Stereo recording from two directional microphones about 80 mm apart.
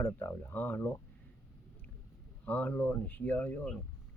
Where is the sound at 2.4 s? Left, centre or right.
Centre.